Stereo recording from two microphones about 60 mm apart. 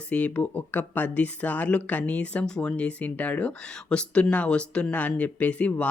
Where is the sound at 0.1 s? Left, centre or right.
Left.